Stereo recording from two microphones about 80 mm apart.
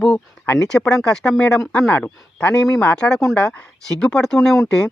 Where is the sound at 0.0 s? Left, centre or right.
Centre.